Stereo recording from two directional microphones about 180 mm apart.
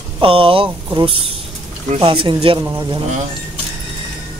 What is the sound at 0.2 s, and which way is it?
Speech, 30° right (ahead or behind).